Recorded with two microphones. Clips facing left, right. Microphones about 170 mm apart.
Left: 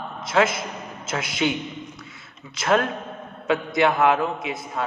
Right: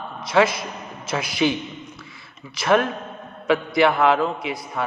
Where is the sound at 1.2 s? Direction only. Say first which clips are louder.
Right 3 dB; 20° left (ahead or behind).